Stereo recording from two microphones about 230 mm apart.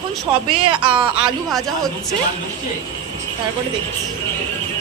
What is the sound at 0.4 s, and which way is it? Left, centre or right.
Speech, right.